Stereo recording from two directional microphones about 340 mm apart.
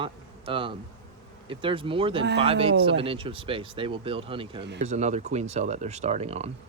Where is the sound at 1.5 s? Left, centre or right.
Centre.